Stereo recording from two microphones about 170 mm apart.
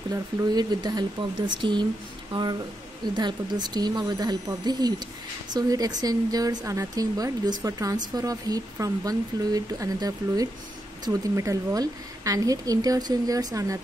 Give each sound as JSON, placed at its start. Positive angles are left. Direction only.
{"t": 0.1, "sound": "speech", "side_deg": -20}